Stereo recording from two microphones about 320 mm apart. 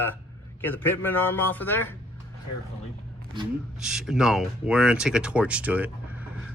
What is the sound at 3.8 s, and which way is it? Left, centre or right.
Speech, centre.